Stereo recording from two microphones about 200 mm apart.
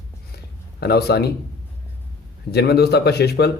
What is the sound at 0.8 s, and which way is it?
Speech, 55° left (ahead or behind).